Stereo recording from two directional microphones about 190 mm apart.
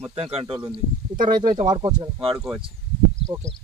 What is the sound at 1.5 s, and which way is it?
Speech, 25° right (ahead or behind).